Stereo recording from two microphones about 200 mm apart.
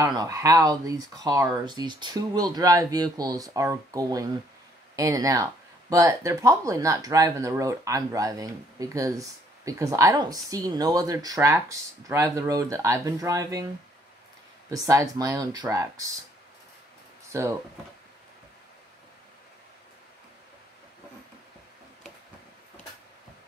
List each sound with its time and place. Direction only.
0.0 s speech: 20° right (ahead or behind)
14.7 s speech: 15° right (ahead or behind)
17.3 s speech: 15° right (ahead or behind)